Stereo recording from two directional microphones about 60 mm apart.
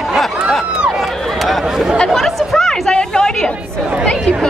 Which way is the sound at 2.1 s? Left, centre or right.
Centre.